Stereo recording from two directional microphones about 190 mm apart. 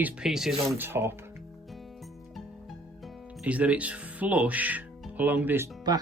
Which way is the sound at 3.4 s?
5° right (ahead or behind).